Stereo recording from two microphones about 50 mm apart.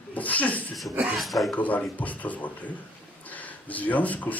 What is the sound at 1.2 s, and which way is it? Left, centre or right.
Speech, centre.